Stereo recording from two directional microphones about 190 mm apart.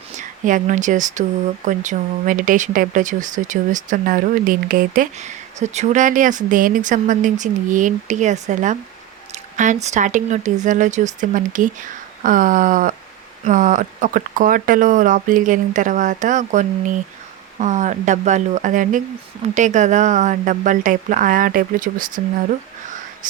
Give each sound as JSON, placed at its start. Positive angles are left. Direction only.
{"t": 0.2, "sound": "speech", "side_deg": -40}
{"t": 9.3, "sound": "a sound", "side_deg": -40}
{"t": 9.8, "sound": "speech", "side_deg": -40}